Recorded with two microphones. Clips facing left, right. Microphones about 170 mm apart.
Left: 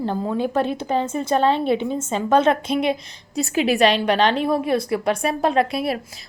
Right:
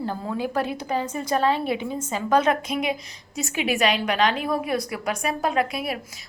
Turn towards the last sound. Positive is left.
turn(degrees=30)  # may be behind; listen again after turning